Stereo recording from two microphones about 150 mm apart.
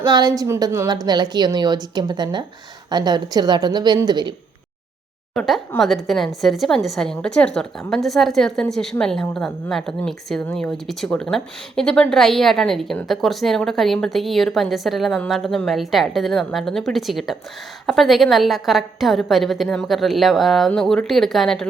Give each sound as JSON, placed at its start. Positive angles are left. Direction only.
{"t": 0.0, "sound": "a woman's voice", "side_deg": -25}
{"t": 5.3, "sound": "a woman's voice", "side_deg": 5}